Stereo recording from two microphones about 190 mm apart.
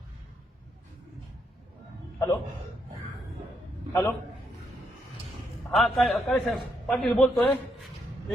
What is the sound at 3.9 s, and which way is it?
Speech, 20° left (ahead or behind).